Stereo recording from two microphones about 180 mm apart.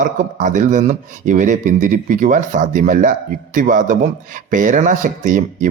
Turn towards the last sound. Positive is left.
turn(degrees=-45)  # may be behind; listen again after turning